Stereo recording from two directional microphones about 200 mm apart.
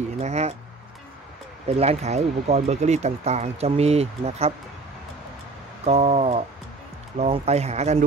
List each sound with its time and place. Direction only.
0.2 s speech: 35° right (ahead or behind)
1.8 s speech: 30° right (ahead or behind)
5.9 s speech: 30° right (ahead or behind)